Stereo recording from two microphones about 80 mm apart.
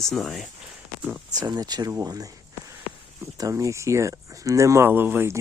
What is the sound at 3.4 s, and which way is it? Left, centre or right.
Speech, right.